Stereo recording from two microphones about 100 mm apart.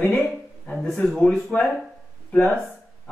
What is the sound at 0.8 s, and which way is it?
Speech, centre (ahead or behind).